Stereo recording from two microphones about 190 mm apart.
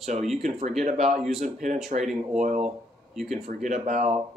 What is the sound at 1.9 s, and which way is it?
Speech, 45° right (ahead or behind).